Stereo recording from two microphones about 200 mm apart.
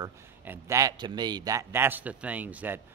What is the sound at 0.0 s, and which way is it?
Speech, 10° right (ahead or behind).